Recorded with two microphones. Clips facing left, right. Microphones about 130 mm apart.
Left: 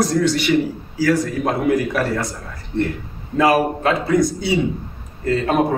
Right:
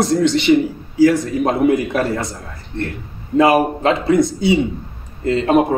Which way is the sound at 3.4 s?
25° right (ahead or behind).